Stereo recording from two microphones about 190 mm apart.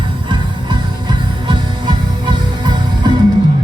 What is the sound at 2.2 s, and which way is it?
Music, 20° right (ahead or behind).